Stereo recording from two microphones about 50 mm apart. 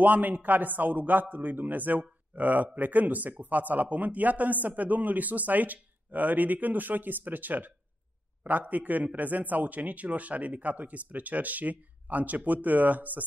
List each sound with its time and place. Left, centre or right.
0.0 s speech: right